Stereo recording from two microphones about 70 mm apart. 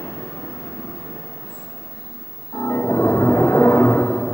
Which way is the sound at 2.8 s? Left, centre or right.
Left.